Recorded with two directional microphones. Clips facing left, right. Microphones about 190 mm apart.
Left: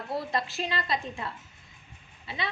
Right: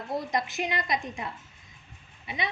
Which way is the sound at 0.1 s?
15° right (ahead or behind).